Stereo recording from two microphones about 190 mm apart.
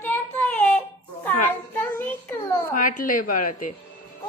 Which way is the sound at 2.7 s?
45° left (ahead or behind).